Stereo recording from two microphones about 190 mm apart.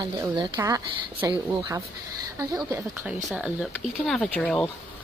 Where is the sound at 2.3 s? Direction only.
15° right (ahead or behind); by 4.6 s 5° left (ahead or behind).